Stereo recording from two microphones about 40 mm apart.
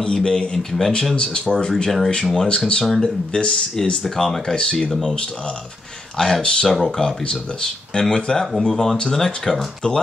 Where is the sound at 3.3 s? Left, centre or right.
Left.